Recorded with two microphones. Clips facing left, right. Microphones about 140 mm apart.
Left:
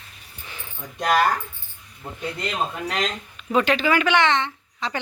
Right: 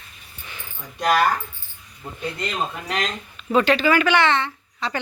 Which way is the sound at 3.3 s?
15° left (ahead or behind).